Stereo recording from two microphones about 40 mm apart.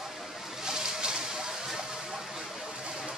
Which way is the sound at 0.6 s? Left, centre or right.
Centre.